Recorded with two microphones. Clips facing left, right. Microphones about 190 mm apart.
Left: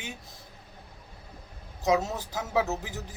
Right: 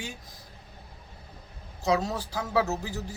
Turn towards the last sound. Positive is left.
turn(degrees=20)  # may be behind; listen again after turning